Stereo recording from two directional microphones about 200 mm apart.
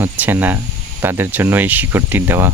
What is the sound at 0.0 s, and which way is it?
Speech, 10° right (ahead or behind).